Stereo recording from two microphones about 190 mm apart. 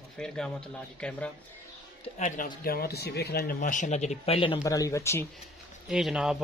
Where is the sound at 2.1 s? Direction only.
40° left (ahead or behind); by 3.5 s 60° left (ahead or behind).